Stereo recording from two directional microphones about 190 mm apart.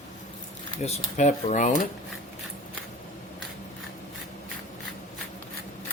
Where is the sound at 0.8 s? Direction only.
35° left (ahead or behind).